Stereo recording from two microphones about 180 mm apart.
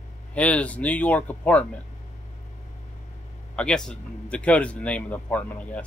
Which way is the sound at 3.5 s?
5° left (ahead or behind).